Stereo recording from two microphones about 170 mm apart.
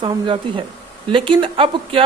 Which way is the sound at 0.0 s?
30° right (ahead or behind).